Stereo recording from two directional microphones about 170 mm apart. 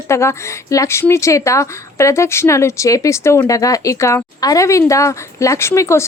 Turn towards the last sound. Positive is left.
turn(degrees=15)  # may be behind; listen again after turning